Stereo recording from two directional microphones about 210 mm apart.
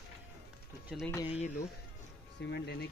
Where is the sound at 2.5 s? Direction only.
50° left (ahead or behind).